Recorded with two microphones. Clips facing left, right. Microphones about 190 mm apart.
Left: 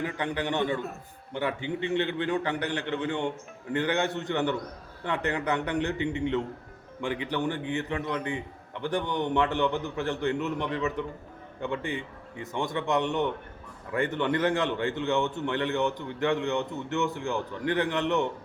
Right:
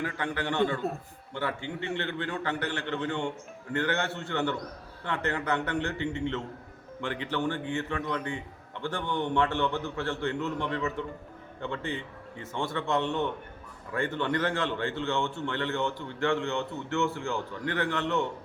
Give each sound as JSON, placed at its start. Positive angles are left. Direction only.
{"t": 0.0, "sound": "a man's voice", "side_deg": 20}